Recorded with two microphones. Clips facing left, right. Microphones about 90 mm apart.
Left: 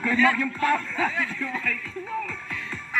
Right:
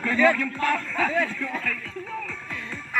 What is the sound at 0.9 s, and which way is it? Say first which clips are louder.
Speech: right 2 dB; centre (ahead or behind).